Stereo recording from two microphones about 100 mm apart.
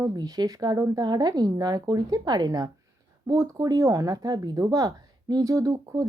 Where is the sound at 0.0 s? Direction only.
40° right (ahead or behind).